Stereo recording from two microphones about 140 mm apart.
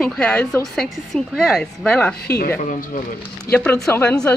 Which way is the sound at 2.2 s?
90° left.